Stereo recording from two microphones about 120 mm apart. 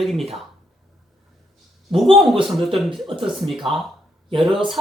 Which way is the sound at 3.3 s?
Centre (ahead or behind).